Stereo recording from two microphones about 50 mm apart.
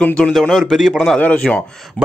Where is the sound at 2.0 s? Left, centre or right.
Left.